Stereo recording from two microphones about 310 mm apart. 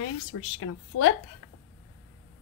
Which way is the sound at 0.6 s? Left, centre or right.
Left.